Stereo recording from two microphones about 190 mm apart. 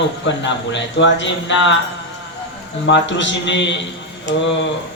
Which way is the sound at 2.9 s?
70° left (ahead or behind).